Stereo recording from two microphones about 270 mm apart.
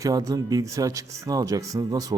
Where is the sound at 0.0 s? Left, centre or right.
Centre.